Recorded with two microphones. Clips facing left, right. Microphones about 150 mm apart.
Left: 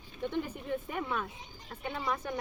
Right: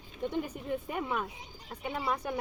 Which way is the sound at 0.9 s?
15° right (ahead or behind).